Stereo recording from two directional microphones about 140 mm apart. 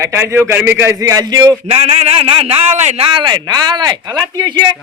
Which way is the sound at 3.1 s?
30° right (ahead or behind).